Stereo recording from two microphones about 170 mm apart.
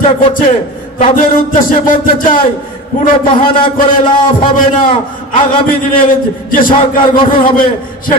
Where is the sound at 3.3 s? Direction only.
30° left (ahead or behind).